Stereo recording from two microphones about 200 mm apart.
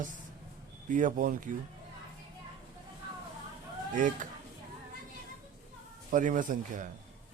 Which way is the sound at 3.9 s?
40° right (ahead or behind).